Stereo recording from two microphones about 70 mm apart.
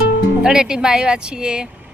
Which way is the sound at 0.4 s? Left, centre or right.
Centre.